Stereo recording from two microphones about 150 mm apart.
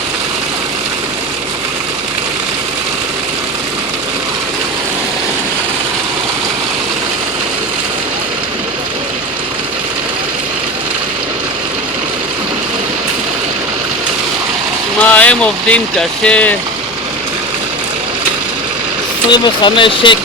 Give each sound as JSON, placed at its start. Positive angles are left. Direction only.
{"t": 15.0, "sound": "speech", "side_deg": 10}
{"t": 19.3, "sound": "speech", "side_deg": 30}